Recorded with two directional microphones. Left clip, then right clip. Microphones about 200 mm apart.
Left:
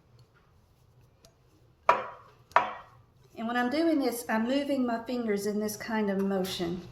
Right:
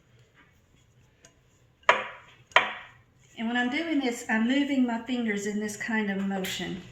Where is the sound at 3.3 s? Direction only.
45° left (ahead or behind).